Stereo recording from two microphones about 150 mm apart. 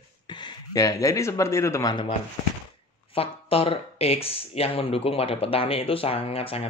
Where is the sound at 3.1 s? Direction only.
40° left (ahead or behind).